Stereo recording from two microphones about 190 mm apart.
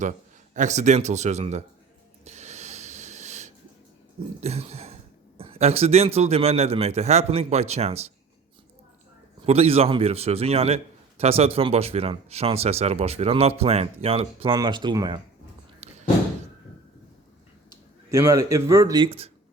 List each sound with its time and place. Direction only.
0.0 s a man's voice: 40° right (ahead or behind)
2.2 s a sound: 35° right (ahead or behind)
4.4 s throat clearing: 35° right (ahead or behind)
5.4 s speech: 30° right (ahead or behind)
9.5 s speech: 30° right (ahead or behind)
15.8 s a sound: 35° right (ahead or behind)
18.1 s speech: 15° right (ahead or behind)